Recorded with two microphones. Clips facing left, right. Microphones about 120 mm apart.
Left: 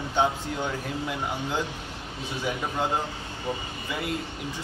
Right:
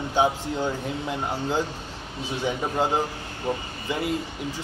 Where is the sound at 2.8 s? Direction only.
25° right (ahead or behind).